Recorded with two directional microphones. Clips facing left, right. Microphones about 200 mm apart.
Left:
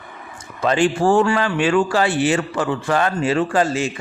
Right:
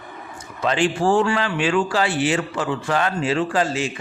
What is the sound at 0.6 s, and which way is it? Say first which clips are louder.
Speech: left 3 dB; 45° left (ahead or behind).